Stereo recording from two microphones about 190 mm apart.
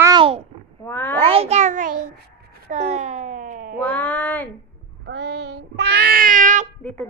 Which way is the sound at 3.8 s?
10° left (ahead or behind).